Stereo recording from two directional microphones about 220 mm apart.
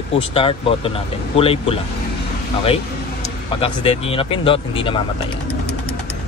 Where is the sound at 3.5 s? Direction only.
25° left (ahead or behind).